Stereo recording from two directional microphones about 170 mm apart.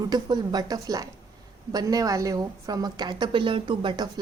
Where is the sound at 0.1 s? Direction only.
25° right (ahead or behind).